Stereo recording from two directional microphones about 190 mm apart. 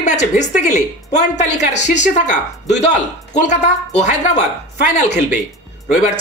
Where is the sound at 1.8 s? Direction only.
40° left (ahead or behind).